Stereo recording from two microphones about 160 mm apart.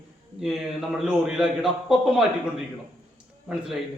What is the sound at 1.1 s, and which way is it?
A man's voice, 5° right (ahead or behind).